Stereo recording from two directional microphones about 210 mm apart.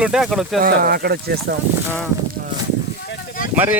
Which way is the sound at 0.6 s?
45° right (ahead or behind).